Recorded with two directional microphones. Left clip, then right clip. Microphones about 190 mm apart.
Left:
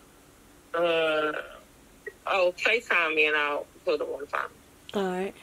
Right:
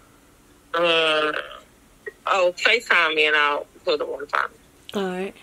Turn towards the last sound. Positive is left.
turn(degrees=0)  # may be behind; listen again after turning